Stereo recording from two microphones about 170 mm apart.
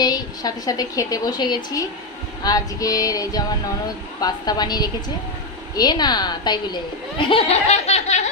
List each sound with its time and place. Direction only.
0.0 s a woman's voice: 20° left (ahead or behind); by 8.3 s 40° left (ahead or behind)